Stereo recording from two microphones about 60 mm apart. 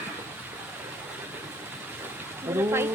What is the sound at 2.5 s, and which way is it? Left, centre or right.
Speech, right.